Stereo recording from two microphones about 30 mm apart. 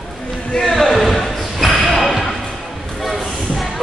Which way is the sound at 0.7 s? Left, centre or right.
Centre.